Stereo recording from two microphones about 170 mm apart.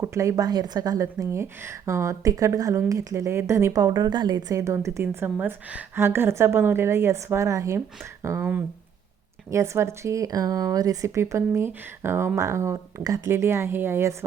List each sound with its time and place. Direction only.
0.0 s speech: 15° right (ahead or behind)